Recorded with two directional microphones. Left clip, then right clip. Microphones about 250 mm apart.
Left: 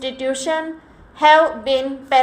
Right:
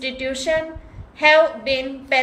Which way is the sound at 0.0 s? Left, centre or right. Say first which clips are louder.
Left 2 dB; centre.